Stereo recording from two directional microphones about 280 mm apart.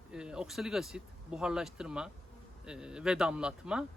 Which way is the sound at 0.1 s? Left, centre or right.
Centre.